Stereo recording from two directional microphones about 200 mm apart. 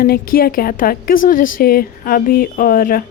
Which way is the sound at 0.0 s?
45° left (ahead or behind).